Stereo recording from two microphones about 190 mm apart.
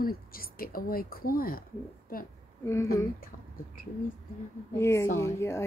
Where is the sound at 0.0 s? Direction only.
50° left (ahead or behind).